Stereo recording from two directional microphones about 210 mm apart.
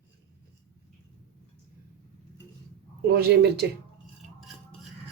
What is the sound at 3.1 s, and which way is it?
Speech, 50° right (ahead or behind).